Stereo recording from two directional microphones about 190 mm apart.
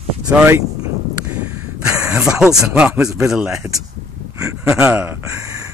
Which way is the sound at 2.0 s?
5° right (ahead or behind).